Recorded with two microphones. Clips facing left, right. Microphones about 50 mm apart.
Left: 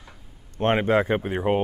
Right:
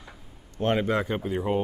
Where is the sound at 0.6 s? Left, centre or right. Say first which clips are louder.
Left 4 dB; left.